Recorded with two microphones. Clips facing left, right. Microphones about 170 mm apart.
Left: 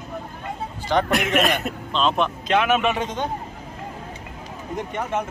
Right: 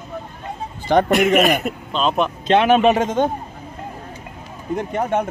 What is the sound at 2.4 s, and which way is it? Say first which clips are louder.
Speech: right 7 dB; 30° right (ahead or behind).